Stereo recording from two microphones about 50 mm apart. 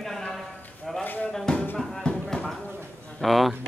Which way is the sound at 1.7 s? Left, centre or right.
Centre.